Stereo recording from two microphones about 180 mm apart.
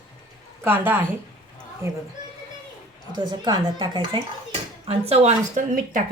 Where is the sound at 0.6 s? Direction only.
10° right (ahead or behind).